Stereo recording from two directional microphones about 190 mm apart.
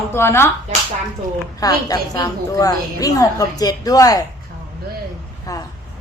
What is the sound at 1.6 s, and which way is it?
A woman's voice, 20° left (ahead or behind).